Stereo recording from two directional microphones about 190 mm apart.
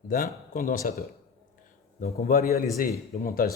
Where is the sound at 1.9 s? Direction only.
35° left (ahead or behind).